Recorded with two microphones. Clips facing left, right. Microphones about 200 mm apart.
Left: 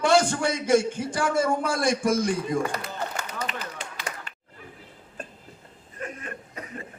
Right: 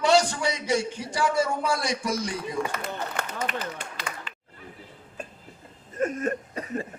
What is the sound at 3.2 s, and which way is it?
Run, 60° right (ahead or behind).